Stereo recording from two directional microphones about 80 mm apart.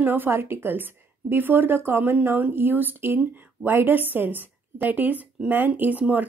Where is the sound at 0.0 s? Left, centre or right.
Right.